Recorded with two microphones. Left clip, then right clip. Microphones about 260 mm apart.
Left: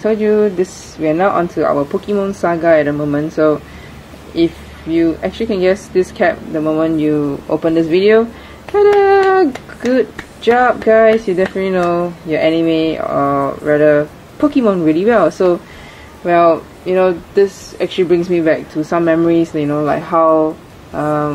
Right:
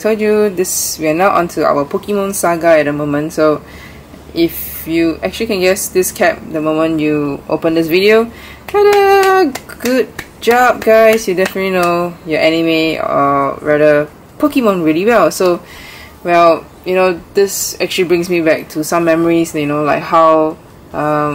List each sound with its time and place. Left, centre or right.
0.0 s a child's voice: centre
1.7 s a child's voice: centre
2.2 s a child's voice: centre